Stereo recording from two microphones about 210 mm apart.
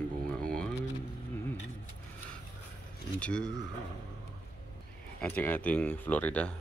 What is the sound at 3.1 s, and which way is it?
Speech, 5° left (ahead or behind).